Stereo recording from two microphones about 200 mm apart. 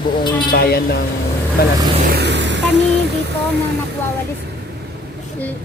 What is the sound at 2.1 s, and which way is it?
Music, 60° right (ahead or behind).